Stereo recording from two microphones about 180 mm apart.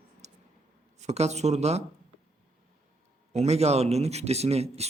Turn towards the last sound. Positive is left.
turn(degrees=-35)  # may be behind; listen again after turning